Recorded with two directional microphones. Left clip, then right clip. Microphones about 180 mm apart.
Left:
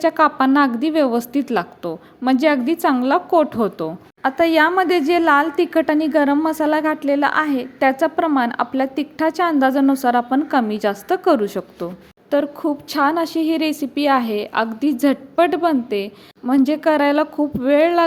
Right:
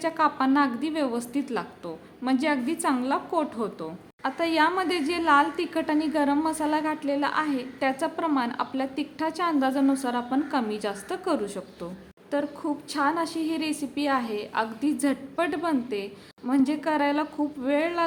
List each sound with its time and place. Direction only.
0.0 s a woman's voice: 40° left (ahead or behind)